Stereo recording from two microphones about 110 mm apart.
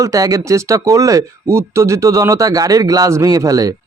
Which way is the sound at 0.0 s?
30° right (ahead or behind).